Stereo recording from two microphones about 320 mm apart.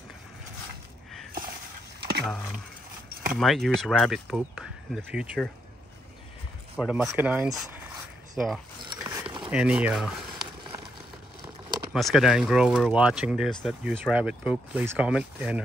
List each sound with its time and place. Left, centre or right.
2.0 s a sound: right
3.3 s speech: centre
6.8 s speech: centre
8.4 s zipper: centre
9.5 s speech: centre
11.9 s speech: centre